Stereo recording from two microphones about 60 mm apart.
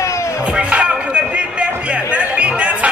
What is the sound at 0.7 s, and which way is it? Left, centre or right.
Music, right.